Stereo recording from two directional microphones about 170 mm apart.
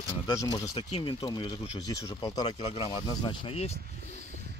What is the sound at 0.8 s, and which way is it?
Speech, 35° left (ahead or behind).